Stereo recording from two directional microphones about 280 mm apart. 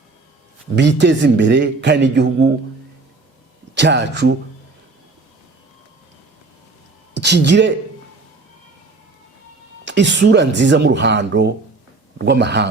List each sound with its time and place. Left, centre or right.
0.8 s speech: right
3.8 s speech: right
7.2 s speech: right
9.8 s speech: right